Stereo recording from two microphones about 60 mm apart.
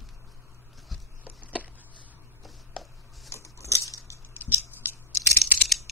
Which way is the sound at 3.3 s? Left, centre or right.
Left.